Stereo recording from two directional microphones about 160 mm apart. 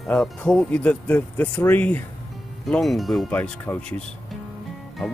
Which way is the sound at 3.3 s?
10° left (ahead or behind).